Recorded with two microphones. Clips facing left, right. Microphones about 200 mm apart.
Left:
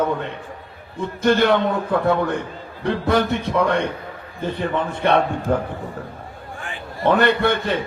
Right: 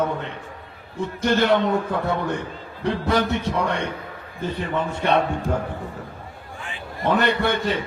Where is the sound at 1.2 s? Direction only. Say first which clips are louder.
Left 2 dB; 55° left (ahead or behind).